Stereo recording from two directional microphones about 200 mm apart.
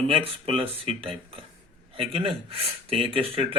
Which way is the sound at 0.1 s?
25° right (ahead or behind).